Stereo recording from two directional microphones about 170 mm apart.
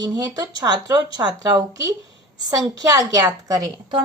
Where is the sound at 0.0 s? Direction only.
25° right (ahead or behind).